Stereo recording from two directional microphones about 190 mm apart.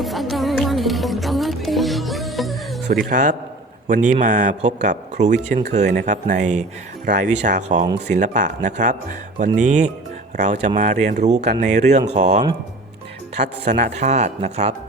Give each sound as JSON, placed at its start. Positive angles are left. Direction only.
{"t": 0.0, "sound": "music", "side_deg": 0}
{"t": 2.9, "sound": "speech", "side_deg": -40}